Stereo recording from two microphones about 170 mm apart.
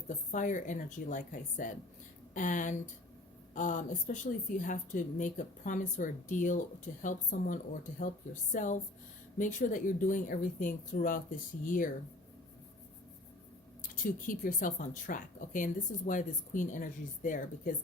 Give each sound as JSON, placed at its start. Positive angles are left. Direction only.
{"t": 0.3, "sound": "speech", "side_deg": 50}
{"t": 13.9, "sound": "speech", "side_deg": 55}